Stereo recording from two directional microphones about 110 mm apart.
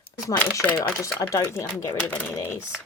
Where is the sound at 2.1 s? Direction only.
15° left (ahead or behind).